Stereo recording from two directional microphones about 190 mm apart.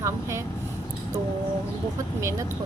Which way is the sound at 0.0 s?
15° right (ahead or behind).